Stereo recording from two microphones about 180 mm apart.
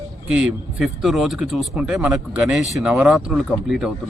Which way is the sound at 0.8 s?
Centre (ahead or behind).